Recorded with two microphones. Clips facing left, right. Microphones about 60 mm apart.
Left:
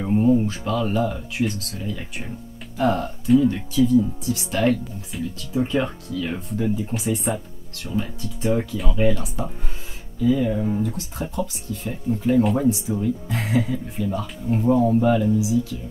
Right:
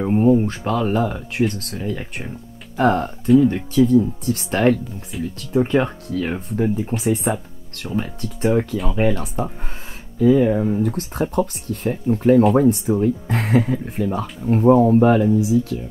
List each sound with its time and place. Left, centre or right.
0.0 s speech: right